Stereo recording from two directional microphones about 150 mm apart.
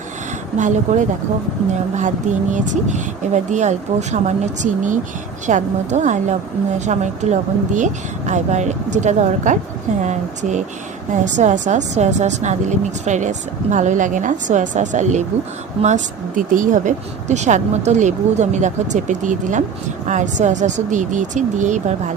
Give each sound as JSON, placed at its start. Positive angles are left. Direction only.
{"t": 0.5, "sound": "speech", "side_deg": -55}